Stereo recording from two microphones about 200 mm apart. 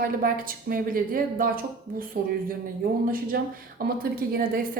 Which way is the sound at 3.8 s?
45° right (ahead or behind).